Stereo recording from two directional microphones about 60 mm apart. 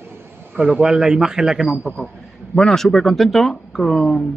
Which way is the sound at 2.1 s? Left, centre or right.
Centre.